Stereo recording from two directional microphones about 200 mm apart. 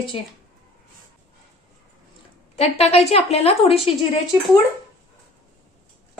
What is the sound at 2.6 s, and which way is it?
A woman's voice, 30° left (ahead or behind).